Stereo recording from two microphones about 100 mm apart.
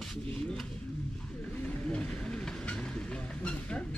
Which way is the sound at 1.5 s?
10° left (ahead or behind).